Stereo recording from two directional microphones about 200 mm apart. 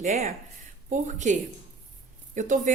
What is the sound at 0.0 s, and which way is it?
A woman's voice, 35° right (ahead or behind).